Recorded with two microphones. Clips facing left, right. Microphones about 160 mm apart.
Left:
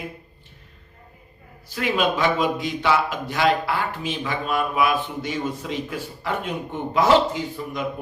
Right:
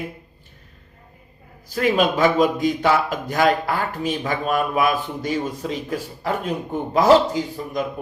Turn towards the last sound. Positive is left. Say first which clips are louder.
# right 4 dB
turn(degrees=-40)  # may be behind; listen again after turning